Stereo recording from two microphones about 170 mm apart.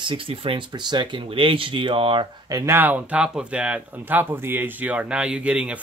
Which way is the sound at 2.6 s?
10° right (ahead or behind).